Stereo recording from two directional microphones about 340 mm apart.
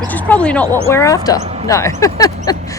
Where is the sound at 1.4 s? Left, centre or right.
Centre.